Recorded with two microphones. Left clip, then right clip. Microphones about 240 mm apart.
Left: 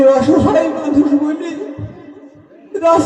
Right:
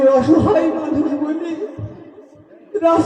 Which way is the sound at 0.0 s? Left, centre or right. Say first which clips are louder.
Left 2 dB; left.